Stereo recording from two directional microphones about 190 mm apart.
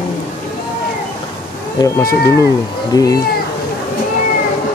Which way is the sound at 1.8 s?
20° left (ahead or behind).